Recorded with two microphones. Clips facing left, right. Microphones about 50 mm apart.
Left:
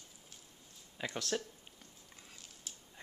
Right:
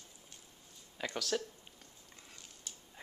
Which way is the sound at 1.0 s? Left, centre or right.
Centre.